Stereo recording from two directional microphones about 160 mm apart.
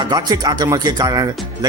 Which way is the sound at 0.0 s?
25° right (ahead or behind).